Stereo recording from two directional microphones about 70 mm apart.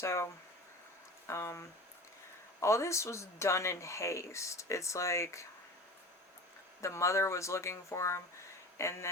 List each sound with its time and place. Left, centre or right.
0.0 s speech: left
1.3 s speech: left
6.8 s speech: left